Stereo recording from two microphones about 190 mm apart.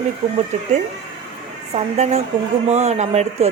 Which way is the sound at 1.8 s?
35° right (ahead or behind).